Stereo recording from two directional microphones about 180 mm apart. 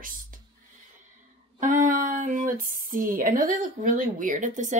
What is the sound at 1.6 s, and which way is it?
Speech, 45° right (ahead or behind).